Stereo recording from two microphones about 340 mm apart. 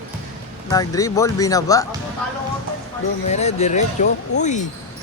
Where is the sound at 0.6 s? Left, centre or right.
Centre.